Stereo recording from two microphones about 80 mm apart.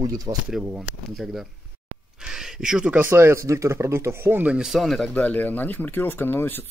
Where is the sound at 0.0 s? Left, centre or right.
Right.